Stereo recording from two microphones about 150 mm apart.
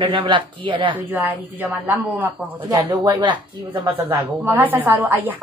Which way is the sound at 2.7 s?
25° right (ahead or behind).